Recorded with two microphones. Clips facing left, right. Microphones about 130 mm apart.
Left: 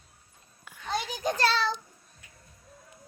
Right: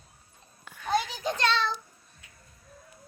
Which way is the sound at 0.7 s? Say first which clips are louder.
Right 2 dB; 10° left (ahead or behind).